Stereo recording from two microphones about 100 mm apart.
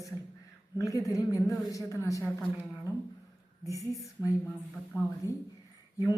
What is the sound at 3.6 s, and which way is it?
Speech, 30° left (ahead or behind).